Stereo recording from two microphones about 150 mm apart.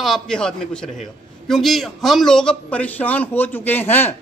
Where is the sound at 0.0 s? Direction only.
Centre (ahead or behind).